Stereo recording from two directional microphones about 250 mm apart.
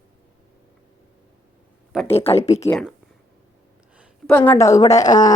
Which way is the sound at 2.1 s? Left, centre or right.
Left.